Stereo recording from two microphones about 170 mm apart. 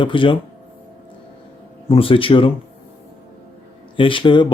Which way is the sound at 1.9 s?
30° left (ahead or behind).